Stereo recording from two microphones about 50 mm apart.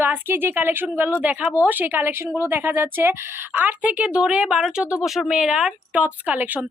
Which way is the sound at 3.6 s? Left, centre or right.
Right.